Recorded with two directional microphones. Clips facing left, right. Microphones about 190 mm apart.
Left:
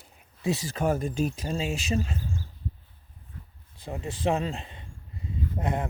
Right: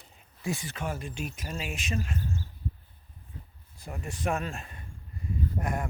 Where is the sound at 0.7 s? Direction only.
40° left (ahead or behind).